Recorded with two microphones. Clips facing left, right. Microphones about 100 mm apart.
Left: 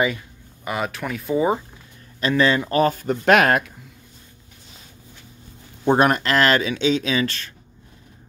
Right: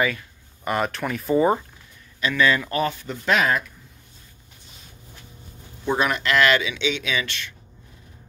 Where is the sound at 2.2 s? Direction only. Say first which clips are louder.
Left 2 dB; 35° left (ahead or behind); by 3.6 s 60° left (ahead or behind).